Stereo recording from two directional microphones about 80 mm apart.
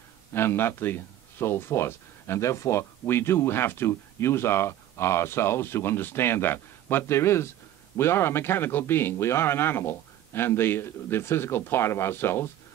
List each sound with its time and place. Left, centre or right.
0.3 s speech: left